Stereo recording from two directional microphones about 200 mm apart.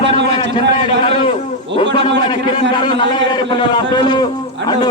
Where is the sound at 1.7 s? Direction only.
65° right (ahead or behind).